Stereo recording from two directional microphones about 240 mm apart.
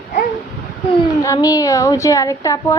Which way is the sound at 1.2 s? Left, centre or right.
Centre.